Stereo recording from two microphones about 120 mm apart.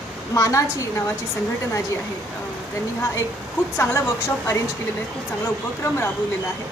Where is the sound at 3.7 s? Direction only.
20° left (ahead or behind).